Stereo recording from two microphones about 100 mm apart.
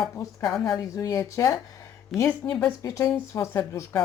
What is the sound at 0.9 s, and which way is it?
Speech, 35° left (ahead or behind).